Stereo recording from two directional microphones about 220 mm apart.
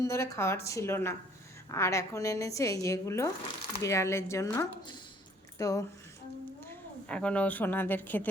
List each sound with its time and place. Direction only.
0.0 s a woman's voice: 15° left (ahead or behind)